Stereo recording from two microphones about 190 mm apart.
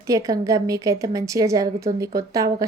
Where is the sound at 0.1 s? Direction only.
15° right (ahead or behind).